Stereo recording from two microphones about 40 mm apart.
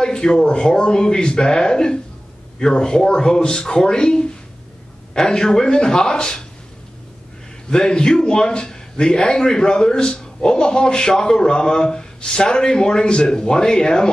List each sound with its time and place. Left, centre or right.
0.0 s a man's voice: centre
7.7 s a man's voice: centre